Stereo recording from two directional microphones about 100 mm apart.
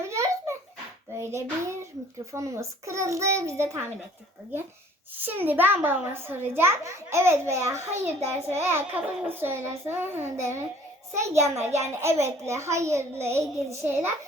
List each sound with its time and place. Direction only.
0.0 s a sound: 30° right (ahead or behind)
1.2 s child singing: 30° right (ahead or behind)
2.3 s a child's voice: 30° right (ahead or behind)
5.1 s a child's voice: 20° right (ahead or behind)